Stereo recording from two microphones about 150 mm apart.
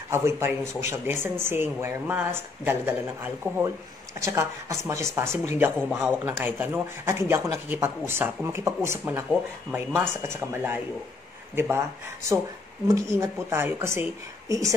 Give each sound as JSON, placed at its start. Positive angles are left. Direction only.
{"t": 0.1, "sound": "speech", "side_deg": -15}
{"t": 5.6, "sound": "speech", "side_deg": -10}
{"t": 12.8, "sound": "speech", "side_deg": -20}